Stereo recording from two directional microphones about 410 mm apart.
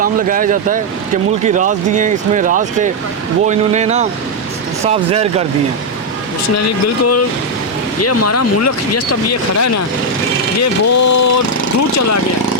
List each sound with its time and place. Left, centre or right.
0.0 s speech: centre
7.0 s speech: left